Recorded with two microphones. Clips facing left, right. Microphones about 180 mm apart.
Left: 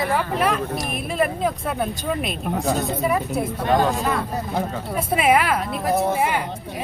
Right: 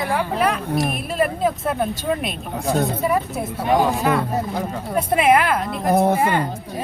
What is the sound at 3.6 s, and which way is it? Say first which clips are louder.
Speech: right 2 dB; 10° right (ahead or behind).